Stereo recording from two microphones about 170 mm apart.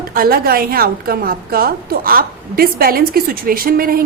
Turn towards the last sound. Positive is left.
turn(degrees=-60)  # may be behind; listen again after turning